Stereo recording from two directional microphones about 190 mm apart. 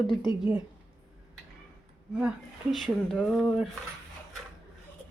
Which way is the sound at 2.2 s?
Centre (ahead or behind).